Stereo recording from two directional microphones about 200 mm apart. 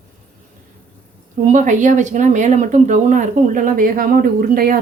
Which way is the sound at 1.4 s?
40° right (ahead or behind).